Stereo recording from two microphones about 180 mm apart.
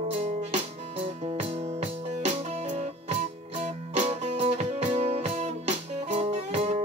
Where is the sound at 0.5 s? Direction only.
35° right (ahead or behind).